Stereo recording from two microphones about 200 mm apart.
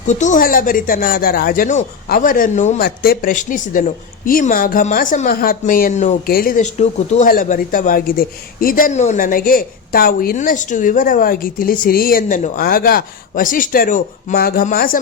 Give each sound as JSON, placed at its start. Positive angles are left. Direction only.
{"t": 0.1, "sound": "a woman's voice", "side_deg": 40}
{"t": 6.2, "sound": "a woman's voice", "side_deg": 45}